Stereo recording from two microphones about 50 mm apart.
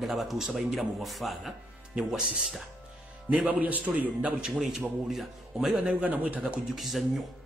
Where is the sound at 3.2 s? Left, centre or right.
Right.